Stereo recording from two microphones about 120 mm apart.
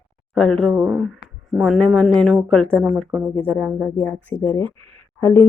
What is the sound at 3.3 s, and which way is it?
Speech, 55° right (ahead or behind).